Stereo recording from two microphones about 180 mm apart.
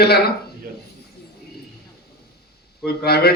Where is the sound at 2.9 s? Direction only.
60° left (ahead or behind).